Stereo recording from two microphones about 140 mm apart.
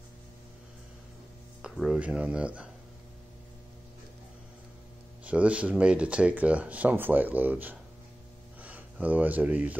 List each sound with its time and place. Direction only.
1.6 s speech: 5° right (ahead or behind)
5.2 s speech: 10° right (ahead or behind)